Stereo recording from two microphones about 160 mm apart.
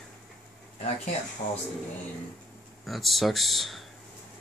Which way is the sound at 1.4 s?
60° left (ahead or behind).